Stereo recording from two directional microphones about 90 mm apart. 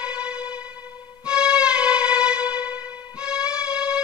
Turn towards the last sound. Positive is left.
turn(degrees=-10)  # may be behind; listen again after turning